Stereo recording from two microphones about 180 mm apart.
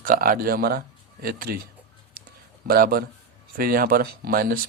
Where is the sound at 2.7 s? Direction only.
55° right (ahead or behind).